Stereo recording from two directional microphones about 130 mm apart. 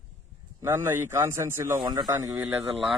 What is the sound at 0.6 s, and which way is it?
A man's voice, 20° right (ahead or behind).